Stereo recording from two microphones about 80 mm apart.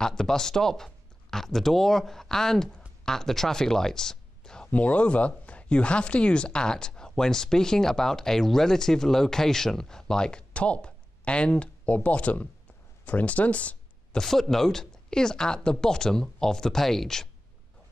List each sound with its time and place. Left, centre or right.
0.0 s speech: centre
14.2 s speech: centre